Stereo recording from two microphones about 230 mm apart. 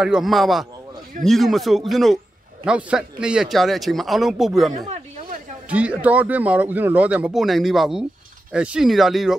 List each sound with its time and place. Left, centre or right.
0.0 s speech: centre
4.8 s chatter: right
5.7 s speech: centre